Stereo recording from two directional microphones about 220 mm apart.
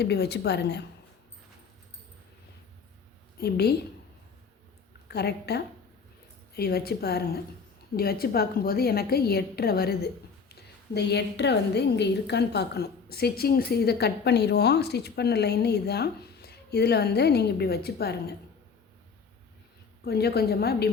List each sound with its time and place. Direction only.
0.0 s a woman's voice: 50° left (ahead or behind)
3.4 s a woman's voice: 45° left (ahead or behind)
5.0 s a woman's voice: 50° left (ahead or behind)
20.1 s a woman's voice: 45° left (ahead or behind)